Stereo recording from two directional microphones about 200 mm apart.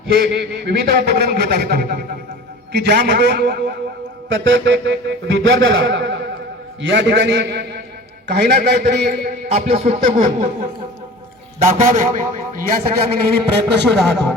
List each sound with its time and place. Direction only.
0.1 s a man's voice: 55° right (ahead or behind)
4.3 s a man's voice: 65° right (ahead or behind); by 9.3 s 50° right (ahead or behind)
9.6 s a man's voice: 30° right (ahead or behind)
11.6 s a man's voice: 40° right (ahead or behind)